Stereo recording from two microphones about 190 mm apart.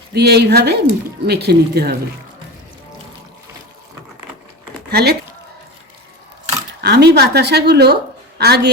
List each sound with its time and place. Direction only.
0.1 s a woman's voice: 60° right (ahead or behind)
4.9 s speech: 55° right (ahead or behind)
6.8 s a woman's voice: 60° right (ahead or behind)